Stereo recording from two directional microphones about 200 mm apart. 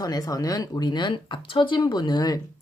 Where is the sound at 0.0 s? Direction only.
20° left (ahead or behind).